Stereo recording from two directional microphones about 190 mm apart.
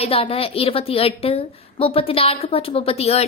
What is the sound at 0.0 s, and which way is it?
A woman's voice, 30° left (ahead or behind).